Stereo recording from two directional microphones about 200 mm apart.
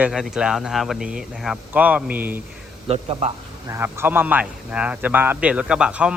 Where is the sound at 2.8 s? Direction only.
30° right (ahead or behind).